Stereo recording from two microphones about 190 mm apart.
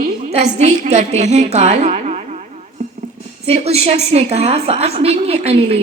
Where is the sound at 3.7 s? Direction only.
35° right (ahead or behind).